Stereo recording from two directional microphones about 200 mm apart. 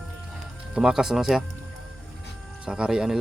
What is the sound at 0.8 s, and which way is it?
Speech, 5° right (ahead or behind).